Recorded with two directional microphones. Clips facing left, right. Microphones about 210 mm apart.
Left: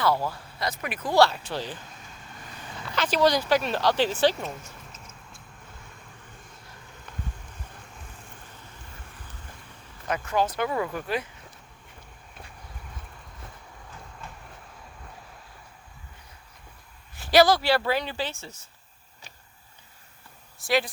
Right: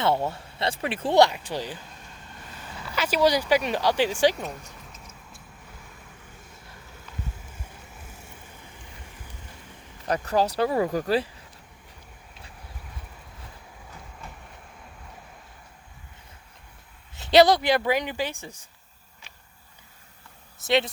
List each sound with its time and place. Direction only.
0.0 s speech: 25° right (ahead or behind)
1.2 s speech: 15° right (ahead or behind)
2.8 s speech: 10° right (ahead or behind)
4.9 s music: centre (ahead or behind)
7.5 s vehicle: 5° right (ahead or behind)
10.1 s speech: 35° right (ahead or behind)
17.2 s speech: 20° right (ahead or behind)
20.6 s speech: 20° right (ahead or behind)